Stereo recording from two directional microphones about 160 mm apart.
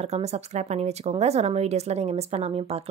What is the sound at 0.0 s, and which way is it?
Speech, 45° right (ahead or behind).